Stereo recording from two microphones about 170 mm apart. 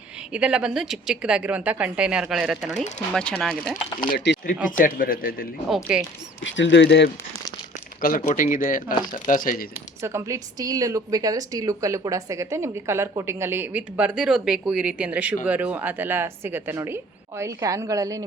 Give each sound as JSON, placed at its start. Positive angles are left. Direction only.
{"t": 0.3, "sound": "a woman's voice", "side_deg": -5}
{"t": 4.3, "sound": "a sound", "side_deg": 90}
{"t": 4.8, "sound": "speech", "side_deg": 55}
{"t": 5.6, "sound": "a woman's voice", "side_deg": -5}
{"t": 6.4, "sound": "speech", "side_deg": 90}
{"t": 8.0, "sound": "speech", "side_deg": 50}
{"t": 10.0, "sound": "a woman's voice", "side_deg": -15}